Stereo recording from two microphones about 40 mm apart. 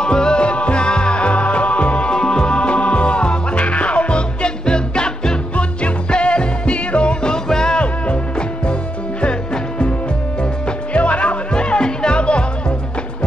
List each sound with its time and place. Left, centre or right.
0.0 s music: left
2.1 s music: centre
7.4 s music: centre
7.8 s music: left
10.9 s music: left